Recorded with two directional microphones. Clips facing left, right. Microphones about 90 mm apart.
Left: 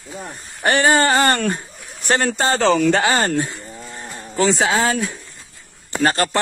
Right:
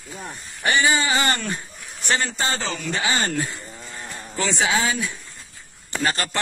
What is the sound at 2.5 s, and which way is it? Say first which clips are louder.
Speech: left 12 dB; 85° left.